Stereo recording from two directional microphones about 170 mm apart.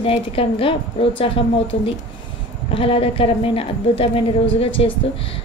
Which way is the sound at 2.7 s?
35° left (ahead or behind).